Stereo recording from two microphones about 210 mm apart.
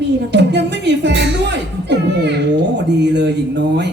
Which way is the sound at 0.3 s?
55° right (ahead or behind).